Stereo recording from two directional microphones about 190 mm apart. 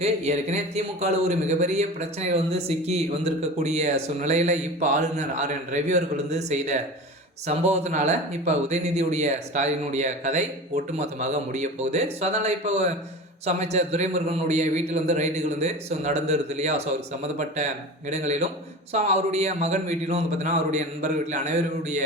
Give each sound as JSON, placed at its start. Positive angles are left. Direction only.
{"t": 0.0, "sound": "speech", "side_deg": -35}
{"t": 18.1, "sound": "speech", "side_deg": -35}